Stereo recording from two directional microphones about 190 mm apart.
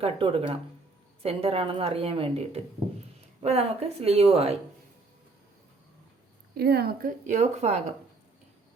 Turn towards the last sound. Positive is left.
turn(degrees=-35)  # may be behind; listen again after turning